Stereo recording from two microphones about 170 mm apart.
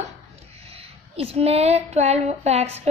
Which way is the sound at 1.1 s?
35° right (ahead or behind).